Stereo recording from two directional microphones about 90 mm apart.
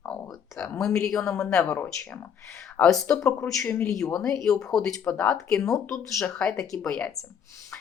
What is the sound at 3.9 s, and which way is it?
Speech, 5° left (ahead or behind).